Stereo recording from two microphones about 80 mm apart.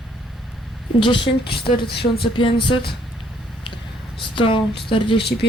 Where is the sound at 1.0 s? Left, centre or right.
Left.